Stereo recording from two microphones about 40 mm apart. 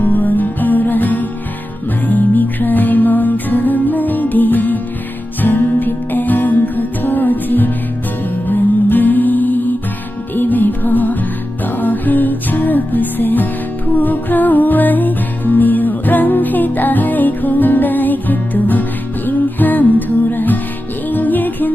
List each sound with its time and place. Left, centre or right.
0.0 s music: left